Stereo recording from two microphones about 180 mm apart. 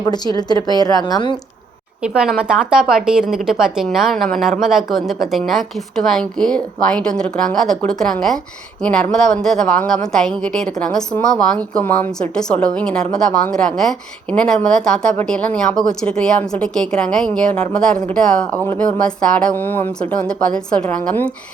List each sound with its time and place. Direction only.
0.0 s a woman's voice: 20° left (ahead or behind)
2.1 s a woman's voice: 5° right (ahead or behind)